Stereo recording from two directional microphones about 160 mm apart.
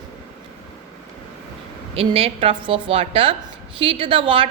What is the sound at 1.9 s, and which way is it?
A woman's voice, 35° right (ahead or behind).